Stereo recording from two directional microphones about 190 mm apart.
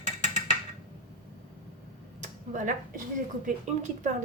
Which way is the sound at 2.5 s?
45° right (ahead or behind).